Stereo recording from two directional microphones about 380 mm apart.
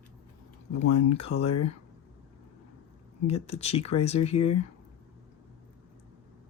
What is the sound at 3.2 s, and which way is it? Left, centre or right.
Speech, centre.